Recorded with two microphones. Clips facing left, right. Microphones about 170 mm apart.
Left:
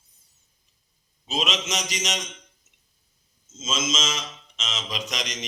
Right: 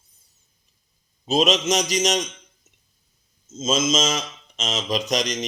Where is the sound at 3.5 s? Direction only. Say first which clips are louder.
Right 7 dB; 35° right (ahead or behind).